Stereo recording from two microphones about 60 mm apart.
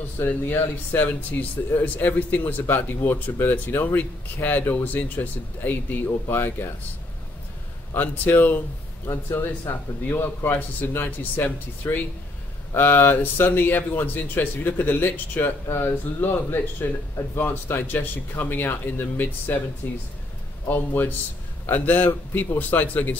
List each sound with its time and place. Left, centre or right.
0.3 s speech: left
7.9 s speech: left